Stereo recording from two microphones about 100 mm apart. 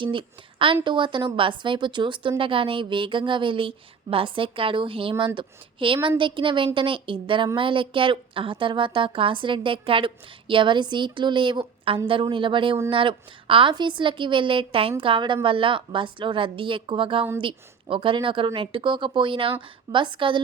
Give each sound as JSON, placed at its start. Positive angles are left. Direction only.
{"t": 0.0, "sound": "a woman's voice", "side_deg": -55}